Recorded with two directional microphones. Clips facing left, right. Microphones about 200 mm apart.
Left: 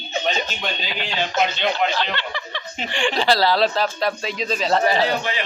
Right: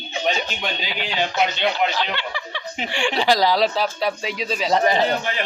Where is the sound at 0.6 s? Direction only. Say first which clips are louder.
Even; 10° right (ahead or behind).